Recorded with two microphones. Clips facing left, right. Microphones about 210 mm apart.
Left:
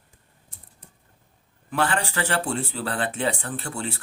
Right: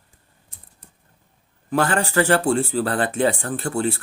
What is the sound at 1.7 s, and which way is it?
A man's voice, 45° right (ahead or behind).